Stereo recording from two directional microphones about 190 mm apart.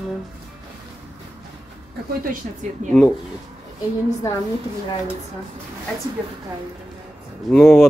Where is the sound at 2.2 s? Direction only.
45° right (ahead or behind).